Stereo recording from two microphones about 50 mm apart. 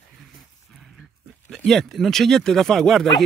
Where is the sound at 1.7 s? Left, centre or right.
Centre.